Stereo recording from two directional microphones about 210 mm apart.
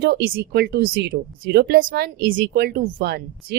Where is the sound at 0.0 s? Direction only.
45° right (ahead or behind).